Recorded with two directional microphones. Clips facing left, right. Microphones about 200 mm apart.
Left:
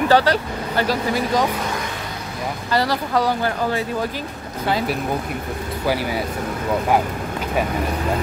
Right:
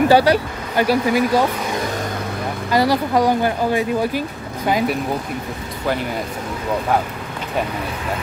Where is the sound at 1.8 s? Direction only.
45° right (ahead or behind).